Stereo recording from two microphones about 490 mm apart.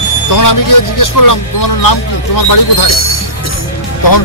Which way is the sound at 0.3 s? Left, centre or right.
Left.